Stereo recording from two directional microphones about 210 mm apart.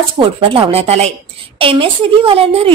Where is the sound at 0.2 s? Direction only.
25° right (ahead or behind).